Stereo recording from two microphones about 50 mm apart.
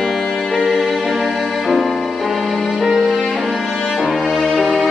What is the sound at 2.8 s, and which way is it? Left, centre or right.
Music, centre.